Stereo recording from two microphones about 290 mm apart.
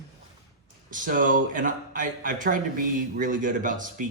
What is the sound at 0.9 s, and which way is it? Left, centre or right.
Speech, right.